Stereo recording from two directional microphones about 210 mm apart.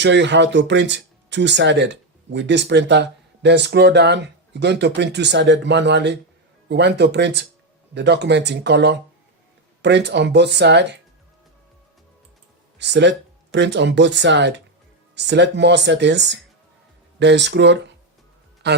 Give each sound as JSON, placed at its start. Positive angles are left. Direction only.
{"t": 0.0, "sound": "speech", "side_deg": -55}
{"t": 12.8, "sound": "speech", "side_deg": -55}